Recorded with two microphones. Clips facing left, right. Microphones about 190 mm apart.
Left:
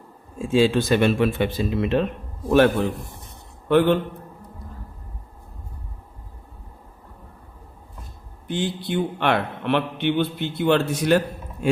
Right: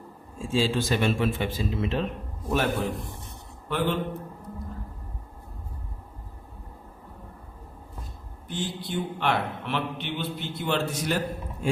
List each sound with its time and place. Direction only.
0.3 s a man's voice: 65° left (ahead or behind)
8.4 s a man's voice: 70° left (ahead or behind)